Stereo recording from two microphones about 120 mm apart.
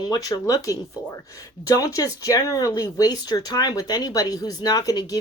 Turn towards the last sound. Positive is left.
turn(degrees=30)  # may be behind; listen again after turning